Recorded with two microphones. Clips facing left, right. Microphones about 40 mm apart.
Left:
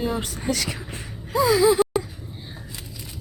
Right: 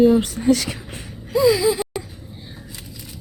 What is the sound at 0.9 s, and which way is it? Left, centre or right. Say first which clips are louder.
Gasp: right 4 dB; left.